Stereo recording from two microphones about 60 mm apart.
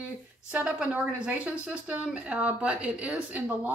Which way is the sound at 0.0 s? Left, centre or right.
Right.